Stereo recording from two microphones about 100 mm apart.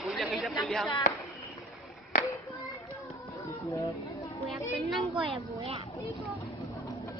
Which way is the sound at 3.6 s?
30° left (ahead or behind).